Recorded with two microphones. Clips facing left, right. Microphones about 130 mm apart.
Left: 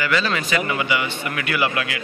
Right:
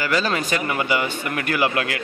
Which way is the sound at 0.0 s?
40° right (ahead or behind).